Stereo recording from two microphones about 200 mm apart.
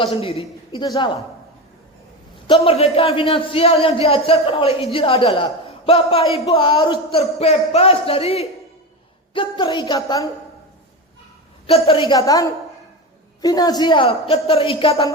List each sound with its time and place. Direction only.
0.0 s a man's voice: 30° left (ahead or behind)
2.5 s a man's voice: 30° left (ahead or behind)
11.6 s a man's voice: 25° left (ahead or behind)